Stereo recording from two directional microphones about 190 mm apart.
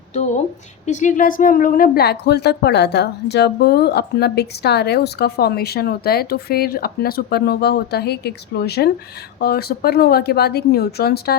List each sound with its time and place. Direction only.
0.1 s a woman's voice: 40° left (ahead or behind); by 11.3 s 55° left (ahead or behind)